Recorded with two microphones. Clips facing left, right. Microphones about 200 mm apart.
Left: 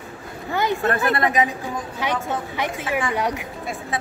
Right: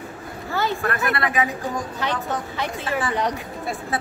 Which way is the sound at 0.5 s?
15° left (ahead or behind).